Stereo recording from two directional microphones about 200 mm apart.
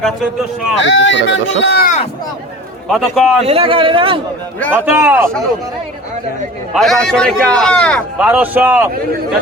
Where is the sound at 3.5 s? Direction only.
30° right (ahead or behind).